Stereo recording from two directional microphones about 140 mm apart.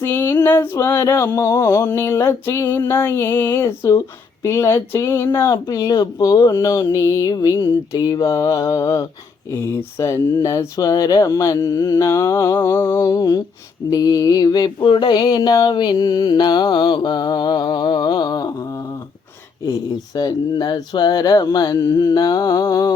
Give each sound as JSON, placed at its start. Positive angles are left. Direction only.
{"t": 0.0, "sound": "speech", "side_deg": 15}
{"t": 13.9, "sound": "a sound", "side_deg": 25}
{"t": 19.6, "sound": "speech", "side_deg": 25}